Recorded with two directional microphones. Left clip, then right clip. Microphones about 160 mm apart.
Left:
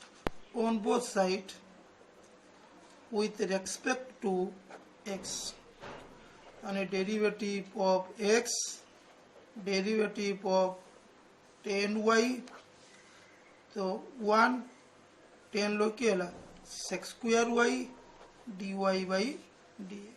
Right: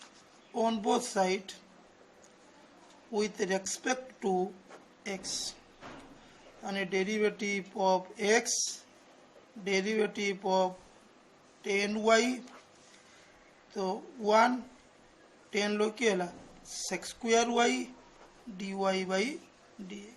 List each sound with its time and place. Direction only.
0.5 s speech: 35° right (ahead or behind)
3.1 s speech: 35° right (ahead or behind)
6.6 s speech: 30° right (ahead or behind)
9.6 s speech: 35° right (ahead or behind)
13.7 s speech: 35° right (ahead or behind)
15.5 s speech: 35° right (ahead or behind)